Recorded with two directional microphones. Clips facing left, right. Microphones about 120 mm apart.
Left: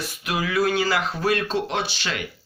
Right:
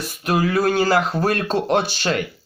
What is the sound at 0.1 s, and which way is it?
Speech, 45° right (ahead or behind).